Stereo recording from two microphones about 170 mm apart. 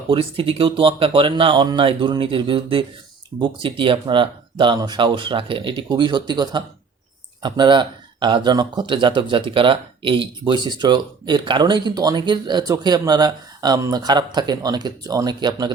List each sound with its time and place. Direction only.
0.1 s speech: 30° right (ahead or behind)